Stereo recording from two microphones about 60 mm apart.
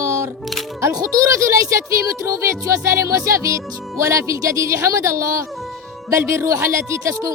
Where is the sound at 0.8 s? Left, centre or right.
Right.